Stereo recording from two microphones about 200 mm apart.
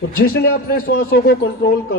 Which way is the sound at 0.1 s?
45° left (ahead or behind).